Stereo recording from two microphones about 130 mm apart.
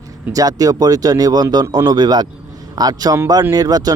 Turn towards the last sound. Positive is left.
turn(degrees=-30)  # may be behind; listen again after turning